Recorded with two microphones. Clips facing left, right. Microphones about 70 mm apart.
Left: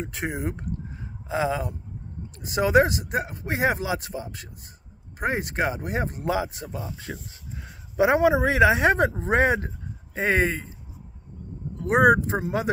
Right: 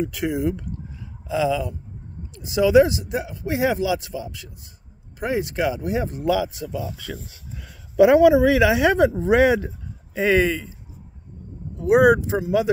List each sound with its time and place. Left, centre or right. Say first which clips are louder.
0.0 s speech: right 7 dB; left
0.9 s a sound: right 4 dB; left
2.3 s speech: right 4 dB; left
10.1 s speech: right 4 dB; left
11.8 s speech: right 3 dB; left